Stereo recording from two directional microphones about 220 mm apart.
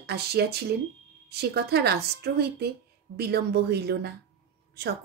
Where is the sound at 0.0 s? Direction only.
45° right (ahead or behind).